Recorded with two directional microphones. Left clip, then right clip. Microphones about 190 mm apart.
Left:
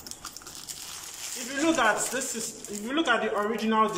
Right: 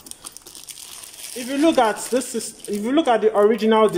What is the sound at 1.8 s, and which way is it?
A man's voice, 45° right (ahead or behind).